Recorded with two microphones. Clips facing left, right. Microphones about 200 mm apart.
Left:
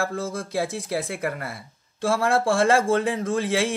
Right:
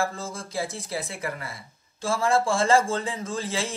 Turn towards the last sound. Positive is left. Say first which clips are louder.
# left 7 dB
turn(degrees=65)  # may be behind; listen again after turning